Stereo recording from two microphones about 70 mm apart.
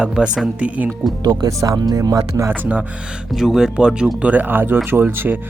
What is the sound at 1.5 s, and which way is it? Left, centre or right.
Speech, right.